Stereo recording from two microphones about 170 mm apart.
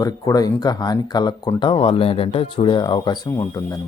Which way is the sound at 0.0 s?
20° left (ahead or behind).